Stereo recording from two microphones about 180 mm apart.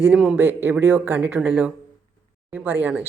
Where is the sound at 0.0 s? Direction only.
5° right (ahead or behind).